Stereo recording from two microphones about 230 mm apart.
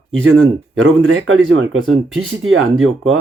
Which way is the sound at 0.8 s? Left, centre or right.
Right.